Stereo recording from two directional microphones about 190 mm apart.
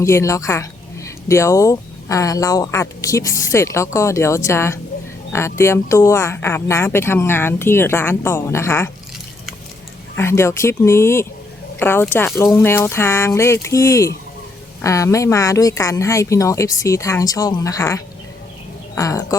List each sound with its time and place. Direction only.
0.0 s speech: 15° left (ahead or behind)
10.2 s speech: 15° left (ahead or behind)